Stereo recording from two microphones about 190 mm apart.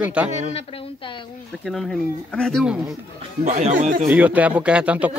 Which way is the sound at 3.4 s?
40° right (ahead or behind).